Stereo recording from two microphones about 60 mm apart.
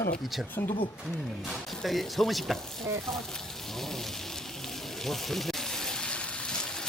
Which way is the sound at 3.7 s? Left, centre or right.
Centre.